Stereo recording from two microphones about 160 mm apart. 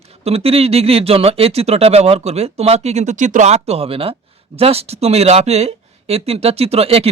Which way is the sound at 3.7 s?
35° right (ahead or behind).